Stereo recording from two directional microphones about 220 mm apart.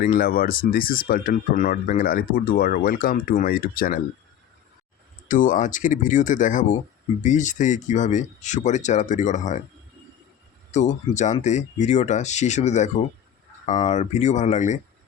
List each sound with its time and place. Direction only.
0.0 s speech: 40° left (ahead or behind)
5.3 s speech: 35° left (ahead or behind)
10.7 s speech: 35° left (ahead or behind)